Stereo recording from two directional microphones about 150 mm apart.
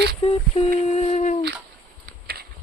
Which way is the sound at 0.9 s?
45° left (ahead or behind).